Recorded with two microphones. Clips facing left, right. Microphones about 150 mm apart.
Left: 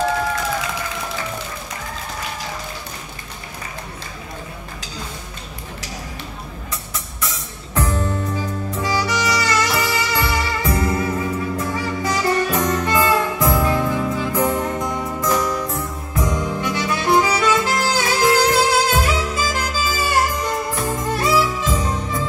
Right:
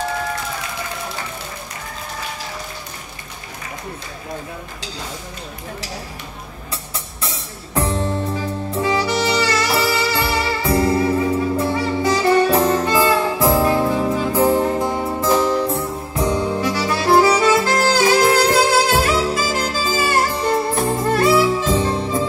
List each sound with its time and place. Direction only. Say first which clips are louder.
6.7 s music: even; 30° right (ahead or behind)